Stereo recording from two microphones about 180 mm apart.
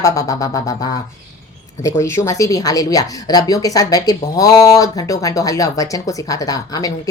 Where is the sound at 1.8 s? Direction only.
15° left (ahead or behind).